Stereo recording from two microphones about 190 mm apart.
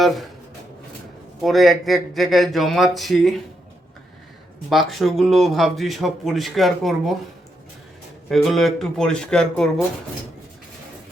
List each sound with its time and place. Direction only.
1.4 s speech: centre (ahead or behind)
4.7 s speech: centre (ahead or behind)
8.3 s speech: centre (ahead or behind)